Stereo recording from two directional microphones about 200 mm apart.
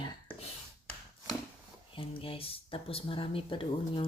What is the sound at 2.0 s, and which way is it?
Speech, 25° left (ahead or behind).